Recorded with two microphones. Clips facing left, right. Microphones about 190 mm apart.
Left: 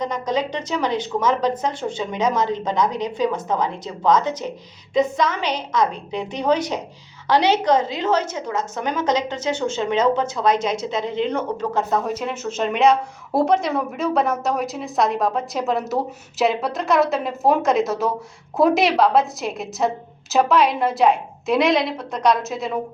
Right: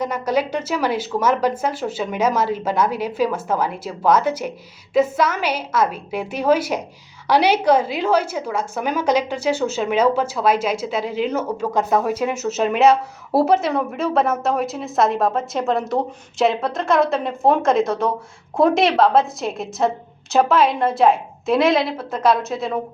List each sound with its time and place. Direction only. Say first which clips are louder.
0.0 s a woman's voice: right 2 dB; 10° right (ahead or behind)